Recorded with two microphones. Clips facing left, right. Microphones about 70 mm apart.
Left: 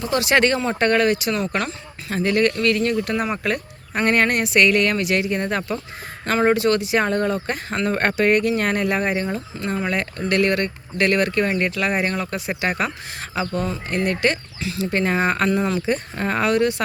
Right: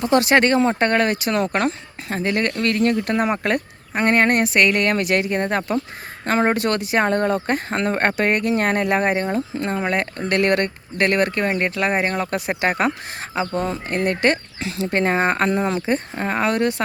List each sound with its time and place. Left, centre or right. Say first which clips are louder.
0.0 s speech: right 2 dB; right
6.5 s speech: left 2 dB; right
12.3 s speech: right 3 dB; right
13.3 s speech: right 1 dB; right
16.2 s speech: left 2 dB; centre
16.5 s speech: left 3 dB; right